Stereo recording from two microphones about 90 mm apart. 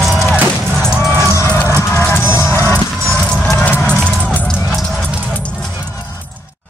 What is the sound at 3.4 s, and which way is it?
Music, 15° left (ahead or behind).